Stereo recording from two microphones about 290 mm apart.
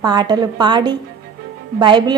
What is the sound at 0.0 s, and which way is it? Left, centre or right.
A woman's voice, centre.